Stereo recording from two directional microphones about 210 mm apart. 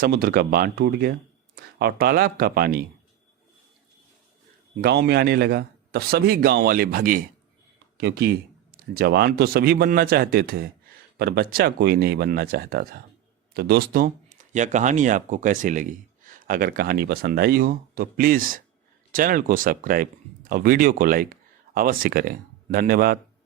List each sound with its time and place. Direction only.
0.0 s speech: 45° right (ahead or behind)
4.8 s speech: 50° right (ahead or behind)